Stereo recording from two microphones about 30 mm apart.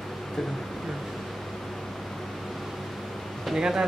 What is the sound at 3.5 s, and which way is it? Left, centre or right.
Speech, centre.